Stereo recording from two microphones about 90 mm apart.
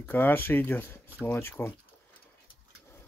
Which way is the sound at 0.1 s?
20° left (ahead or behind).